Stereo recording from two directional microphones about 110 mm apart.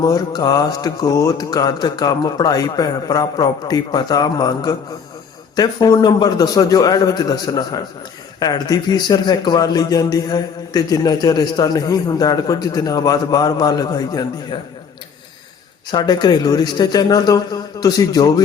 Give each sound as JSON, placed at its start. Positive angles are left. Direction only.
{"t": 0.0, "sound": "a man's voice", "side_deg": 35}
{"t": 15.9, "sound": "a man's voice", "side_deg": 40}